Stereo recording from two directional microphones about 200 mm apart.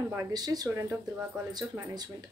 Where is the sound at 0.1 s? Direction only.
15° right (ahead or behind).